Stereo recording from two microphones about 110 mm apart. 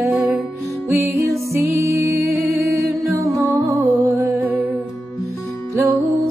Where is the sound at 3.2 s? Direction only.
30° right (ahead or behind).